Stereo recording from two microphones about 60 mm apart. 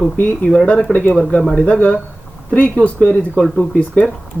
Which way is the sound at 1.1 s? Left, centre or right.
Centre.